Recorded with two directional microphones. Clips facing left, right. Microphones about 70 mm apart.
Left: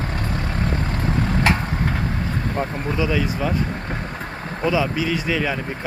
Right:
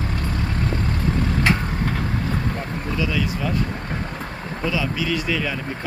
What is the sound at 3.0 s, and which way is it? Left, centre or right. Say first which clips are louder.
Speech: left 3 dB; left.